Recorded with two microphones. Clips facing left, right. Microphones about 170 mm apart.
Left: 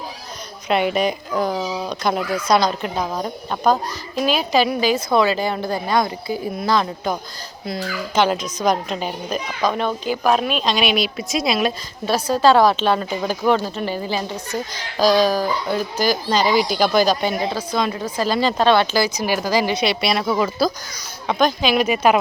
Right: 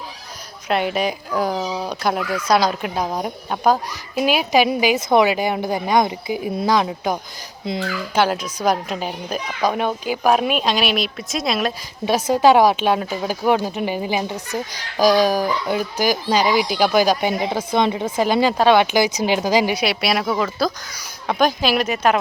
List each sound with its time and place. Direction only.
0.7 s speech: centre (ahead or behind)
12.0 s speech: 15° right (ahead or behind)
21.8 s a woman's voice: 10° left (ahead or behind)